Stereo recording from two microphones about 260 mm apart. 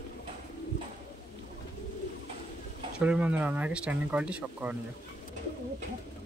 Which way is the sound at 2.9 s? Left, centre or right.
Centre.